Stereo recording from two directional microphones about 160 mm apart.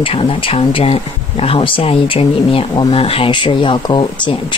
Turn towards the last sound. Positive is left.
turn(degrees=30)  # may be behind; listen again after turning